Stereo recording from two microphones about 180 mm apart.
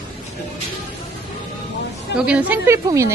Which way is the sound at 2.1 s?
5° right (ahead or behind).